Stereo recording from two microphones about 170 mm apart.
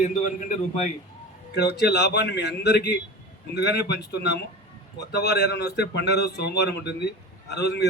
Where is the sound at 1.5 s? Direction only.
75° left (ahead or behind).